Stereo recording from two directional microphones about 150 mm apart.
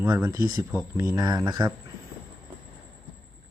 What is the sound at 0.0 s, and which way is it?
Speech, 20° right (ahead or behind).